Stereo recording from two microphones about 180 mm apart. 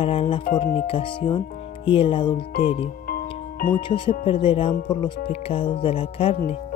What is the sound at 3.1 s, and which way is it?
Music, 50° left (ahead or behind).